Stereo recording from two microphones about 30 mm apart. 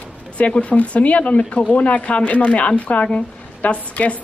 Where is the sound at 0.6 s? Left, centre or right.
Left.